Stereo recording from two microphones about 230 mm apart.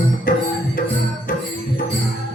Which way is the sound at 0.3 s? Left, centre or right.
Left.